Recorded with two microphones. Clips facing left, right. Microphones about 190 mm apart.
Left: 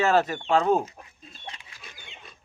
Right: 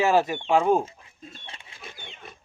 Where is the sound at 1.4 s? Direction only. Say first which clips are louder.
Left 1 dB; 25° right (ahead or behind).